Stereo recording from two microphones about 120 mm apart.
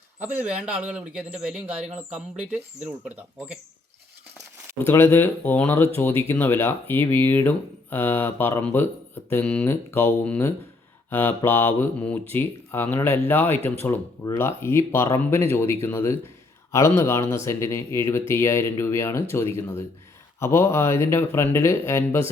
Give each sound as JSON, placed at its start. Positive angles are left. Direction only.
{"t": 0.2, "sound": "speech", "side_deg": -10}
{"t": 4.8, "sound": "speech", "side_deg": 20}
{"t": 9.6, "sound": "mantra", "side_deg": 15}
{"t": 12.3, "sound": "speech", "side_deg": 20}
{"t": 13.8, "sound": "mantra", "side_deg": 15}
{"t": 14.3, "sound": "speech", "side_deg": 20}